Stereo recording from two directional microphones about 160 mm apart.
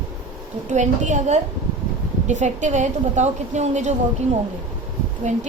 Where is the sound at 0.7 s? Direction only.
50° right (ahead or behind).